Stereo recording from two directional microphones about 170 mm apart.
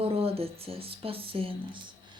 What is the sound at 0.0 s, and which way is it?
Speech, 35° right (ahead or behind).